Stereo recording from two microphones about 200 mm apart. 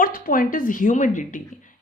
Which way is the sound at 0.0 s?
45° left (ahead or behind).